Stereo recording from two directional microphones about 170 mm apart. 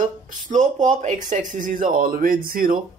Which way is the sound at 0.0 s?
50° right (ahead or behind).